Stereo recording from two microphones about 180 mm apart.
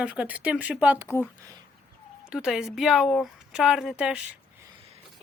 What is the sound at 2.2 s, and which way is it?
Speech, 5° right (ahead or behind).